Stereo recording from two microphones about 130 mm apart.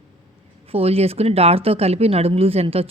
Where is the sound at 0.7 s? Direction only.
50° right (ahead or behind).